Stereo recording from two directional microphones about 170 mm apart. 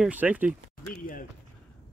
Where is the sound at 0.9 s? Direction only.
55° left (ahead or behind).